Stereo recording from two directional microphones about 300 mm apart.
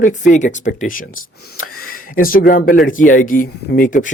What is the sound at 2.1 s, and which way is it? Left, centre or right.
Speech, left.